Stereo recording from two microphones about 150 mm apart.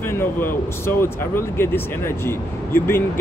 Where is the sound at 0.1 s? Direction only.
15° left (ahead or behind).